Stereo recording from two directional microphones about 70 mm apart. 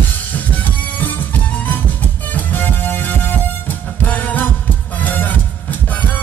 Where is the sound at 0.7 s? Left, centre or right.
Left.